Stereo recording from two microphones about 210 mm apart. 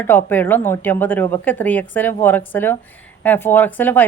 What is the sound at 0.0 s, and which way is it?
A woman's voice, 10° left (ahead or behind).